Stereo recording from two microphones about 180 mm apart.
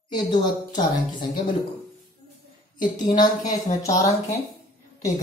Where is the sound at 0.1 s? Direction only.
25° left (ahead or behind).